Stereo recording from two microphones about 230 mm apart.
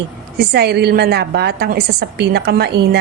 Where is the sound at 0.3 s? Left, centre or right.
Right.